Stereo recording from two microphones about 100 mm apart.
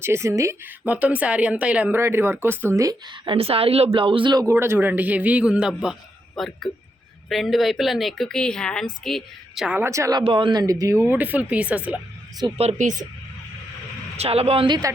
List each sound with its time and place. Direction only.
0.0 s speech: 25° right (ahead or behind)
0.9 s a man's voice: 15° right (ahead or behind)
2.0 s speech: 25° right (ahead or behind)
3.1 s a woman's voice: 65° right (ahead or behind)
3.9 s speech: 60° right (ahead or behind)
4.5 s a man's voice: 20° right (ahead or behind); by 9.6 s 5° left (ahead or behind)
9.8 s speech: 30° right (ahead or behind)
10.2 s speech: 55° right (ahead or behind)
10.6 s speech: 35° right (ahead or behind)
10.9 s a man's voice: 20° right (ahead or behind)
12.4 s a woman's voice: 45° right (ahead or behind)
14.2 s speech: 85° right
14.7 s speech: 40° right (ahead or behind)